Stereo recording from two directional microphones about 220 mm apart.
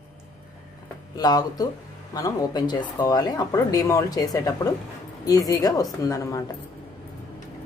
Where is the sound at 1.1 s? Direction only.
15° left (ahead or behind).